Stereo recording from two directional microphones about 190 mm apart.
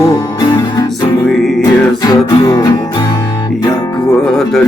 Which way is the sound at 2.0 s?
20° left (ahead or behind).